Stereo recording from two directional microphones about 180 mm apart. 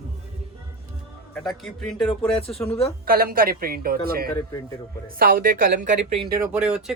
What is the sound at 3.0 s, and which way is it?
A woman's voice, 55° right (ahead or behind).